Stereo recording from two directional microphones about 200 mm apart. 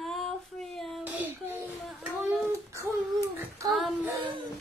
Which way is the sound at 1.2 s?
10° right (ahead or behind).